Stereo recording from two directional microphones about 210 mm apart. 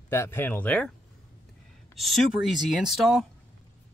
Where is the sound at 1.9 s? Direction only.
Centre (ahead or behind).